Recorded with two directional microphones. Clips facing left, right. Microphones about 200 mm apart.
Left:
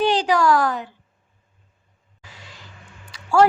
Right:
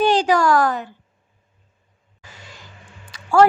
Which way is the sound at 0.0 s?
45° right (ahead or behind).